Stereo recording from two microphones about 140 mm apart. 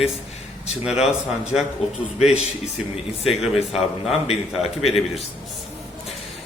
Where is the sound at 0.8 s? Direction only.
5° right (ahead or behind).